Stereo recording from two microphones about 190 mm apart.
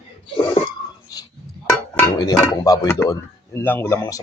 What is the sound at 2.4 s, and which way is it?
Speech, 20° left (ahead or behind).